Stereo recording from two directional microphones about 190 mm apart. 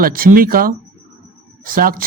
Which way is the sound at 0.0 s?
50° right (ahead or behind).